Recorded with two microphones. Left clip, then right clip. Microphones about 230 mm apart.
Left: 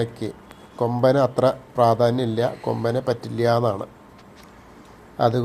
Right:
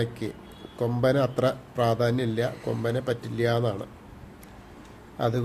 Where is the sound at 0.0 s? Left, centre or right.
Centre.